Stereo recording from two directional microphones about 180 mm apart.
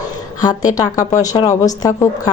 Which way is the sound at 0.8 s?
20° left (ahead or behind).